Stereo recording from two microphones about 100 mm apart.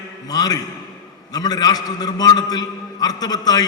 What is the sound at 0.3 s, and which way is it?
A man's voice, 40° left (ahead or behind).